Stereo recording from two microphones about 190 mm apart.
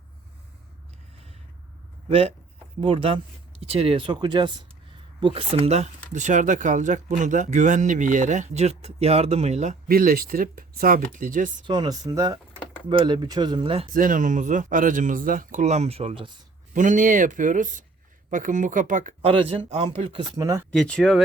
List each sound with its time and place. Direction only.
2.0 s speech: 30° right (ahead or behind)
9.9 s speech: 50° right (ahead or behind)
11.6 s speech: 25° right (ahead or behind)
13.9 s speech: 45° right (ahead or behind); by 16.3 s 30° right (ahead or behind)
16.7 s speech: 40° right (ahead or behind)
19.3 s speech: 30° right (ahead or behind)
20.3 s speech: 15° right (ahead or behind)
20.7 s speech: 5° left (ahead or behind)